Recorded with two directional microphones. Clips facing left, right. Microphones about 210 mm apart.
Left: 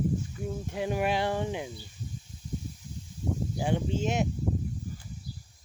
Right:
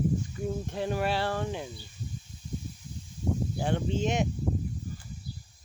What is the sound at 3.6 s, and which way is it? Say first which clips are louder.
Speech: left 2 dB; 10° left (ahead or behind).